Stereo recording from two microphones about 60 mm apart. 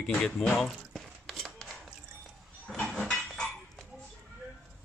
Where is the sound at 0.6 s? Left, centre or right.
Centre.